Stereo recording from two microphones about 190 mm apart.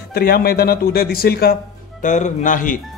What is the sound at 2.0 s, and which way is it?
Speech, 40° left (ahead or behind).